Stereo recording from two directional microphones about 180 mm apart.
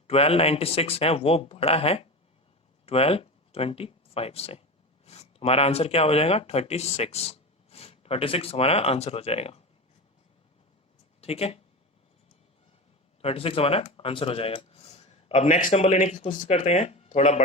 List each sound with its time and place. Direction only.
0.1 s speech: 35° left (ahead or behind)
11.2 s speech: 35° left (ahead or behind)
13.2 s speech: 30° left (ahead or behind)